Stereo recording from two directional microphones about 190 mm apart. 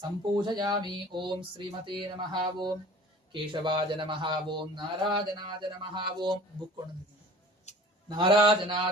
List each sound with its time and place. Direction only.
0.4 s speech: 20° right (ahead or behind)
7.7 s a sound: 35° left (ahead or behind)
8.0 s speech: 25° right (ahead or behind)